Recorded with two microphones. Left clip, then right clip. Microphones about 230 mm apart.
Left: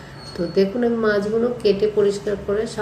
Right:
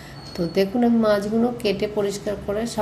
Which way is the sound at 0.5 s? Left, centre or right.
Right.